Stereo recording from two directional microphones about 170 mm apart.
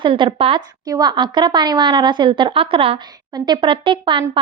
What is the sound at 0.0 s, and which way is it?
Speech, 30° right (ahead or behind).